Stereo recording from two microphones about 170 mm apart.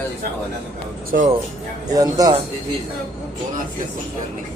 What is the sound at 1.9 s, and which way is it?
Speech, 20° right (ahead or behind).